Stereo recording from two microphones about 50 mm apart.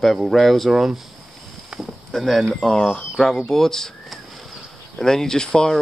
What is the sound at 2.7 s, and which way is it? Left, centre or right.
Speech, centre.